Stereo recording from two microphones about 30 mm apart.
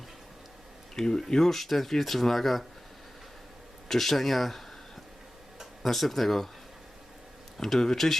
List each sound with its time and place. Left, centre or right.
0.9 s speech: left; by 2.6 s centre
3.8 s speech: centre
5.8 s speech: centre
7.6 s speech: centre